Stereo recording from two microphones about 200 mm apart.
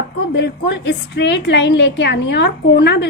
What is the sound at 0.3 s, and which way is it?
A woman's voice, 60° left (ahead or behind).